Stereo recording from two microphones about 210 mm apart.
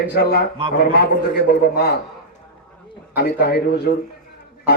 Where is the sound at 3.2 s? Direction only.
45° left (ahead or behind).